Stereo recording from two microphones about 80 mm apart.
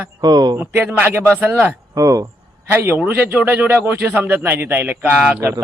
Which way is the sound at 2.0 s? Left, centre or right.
Right.